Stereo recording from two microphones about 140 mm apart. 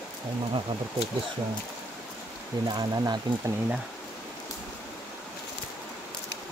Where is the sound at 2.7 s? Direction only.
30° right (ahead or behind).